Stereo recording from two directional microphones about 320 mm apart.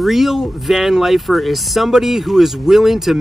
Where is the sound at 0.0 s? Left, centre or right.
Centre.